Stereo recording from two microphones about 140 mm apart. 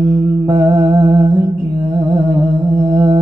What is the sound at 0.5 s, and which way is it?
Mantra, 25° right (ahead or behind).